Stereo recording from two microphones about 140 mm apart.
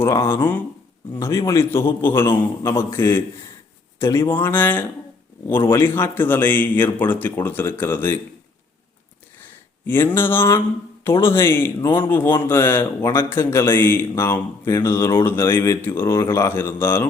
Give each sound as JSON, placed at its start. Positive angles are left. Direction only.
{"t": 0.0, "sound": "a man's voice", "side_deg": 20}
{"t": 9.8, "sound": "a sound", "side_deg": 15}
{"t": 10.2, "sound": "a man's voice", "side_deg": 15}